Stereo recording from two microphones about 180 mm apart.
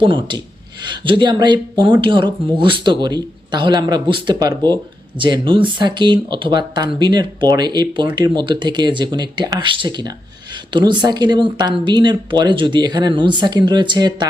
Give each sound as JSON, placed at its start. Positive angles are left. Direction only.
{"t": 0.0, "sound": "speech", "side_deg": -25}